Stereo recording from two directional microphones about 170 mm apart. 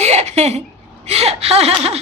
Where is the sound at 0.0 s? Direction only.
40° right (ahead or behind).